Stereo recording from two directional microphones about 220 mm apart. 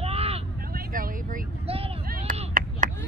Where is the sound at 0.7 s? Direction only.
40° right (ahead or behind).